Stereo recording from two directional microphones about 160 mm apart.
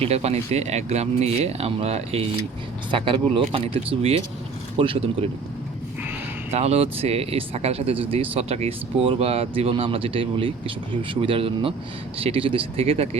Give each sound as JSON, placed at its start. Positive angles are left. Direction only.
{"t": 0.0, "sound": "speech", "side_deg": -40}
{"t": 6.5, "sound": "speech", "side_deg": -40}